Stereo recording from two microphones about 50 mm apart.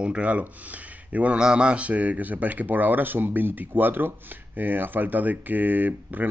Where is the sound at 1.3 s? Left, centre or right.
Centre.